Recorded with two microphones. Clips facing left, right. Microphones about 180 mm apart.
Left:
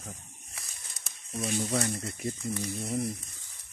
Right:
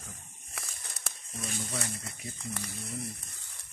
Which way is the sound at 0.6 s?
60° right (ahead or behind).